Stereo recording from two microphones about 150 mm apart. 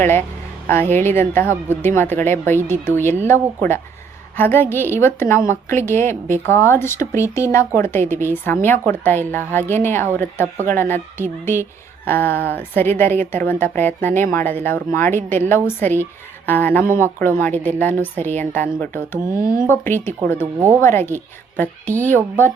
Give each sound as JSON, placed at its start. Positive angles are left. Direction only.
{"t": 0.0, "sound": "a woman's voice", "side_deg": 15}
{"t": 19.4, "sound": "speech", "side_deg": -70}
{"t": 19.6, "sound": "a woman's voice", "side_deg": 15}